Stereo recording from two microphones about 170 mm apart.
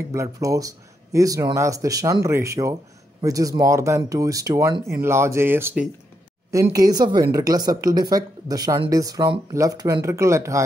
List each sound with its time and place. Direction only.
0.1 s speech: 20° right (ahead or behind)